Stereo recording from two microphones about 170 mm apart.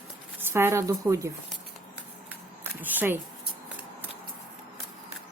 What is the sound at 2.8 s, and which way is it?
Speech, 10° right (ahead or behind).